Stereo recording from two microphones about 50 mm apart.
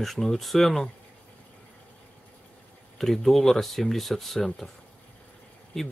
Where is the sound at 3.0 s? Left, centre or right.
Centre.